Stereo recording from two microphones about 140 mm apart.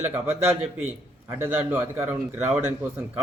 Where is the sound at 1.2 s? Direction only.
20° right (ahead or behind).